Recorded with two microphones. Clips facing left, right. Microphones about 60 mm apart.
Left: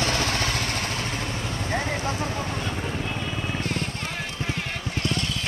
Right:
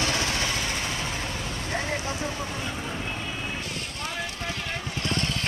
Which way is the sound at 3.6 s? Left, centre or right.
Left.